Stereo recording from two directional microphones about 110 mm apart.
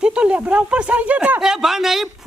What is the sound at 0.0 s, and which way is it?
Speech, 10° right (ahead or behind).